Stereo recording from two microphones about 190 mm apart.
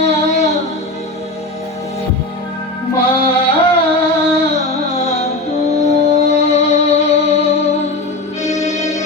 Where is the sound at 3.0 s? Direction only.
30° left (ahead or behind).